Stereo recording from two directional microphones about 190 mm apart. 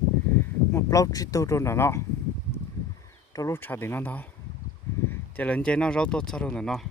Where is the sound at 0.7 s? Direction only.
15° left (ahead or behind).